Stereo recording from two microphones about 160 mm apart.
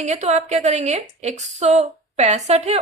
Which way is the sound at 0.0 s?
45° right (ahead or behind).